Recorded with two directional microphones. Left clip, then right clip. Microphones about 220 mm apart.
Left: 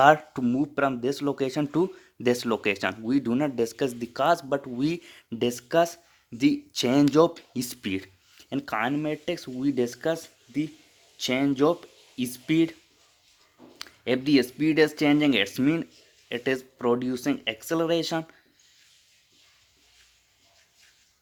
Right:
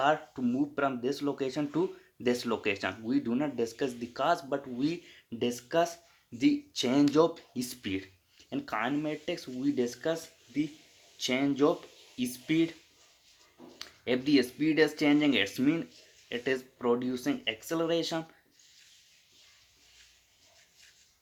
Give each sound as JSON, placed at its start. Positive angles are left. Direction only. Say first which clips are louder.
{"t": 0.0, "sound": "speech", "louder": "left 9 dB", "side_deg": 50}
{"t": 13.7, "sound": "speech", "louder": "left 4 dB", "side_deg": 45}